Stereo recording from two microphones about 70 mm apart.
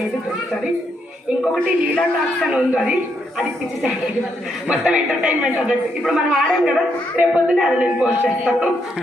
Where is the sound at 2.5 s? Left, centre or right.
Centre.